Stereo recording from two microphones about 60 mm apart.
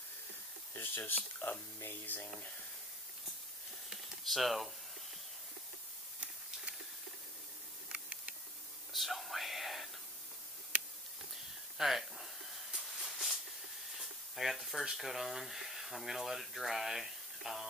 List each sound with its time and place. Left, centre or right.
0.7 s speech: left
4.2 s speech: centre
8.9 s whispering: centre
11.8 s speech: centre
12.7 s a sound: centre
13.9 s speech: centre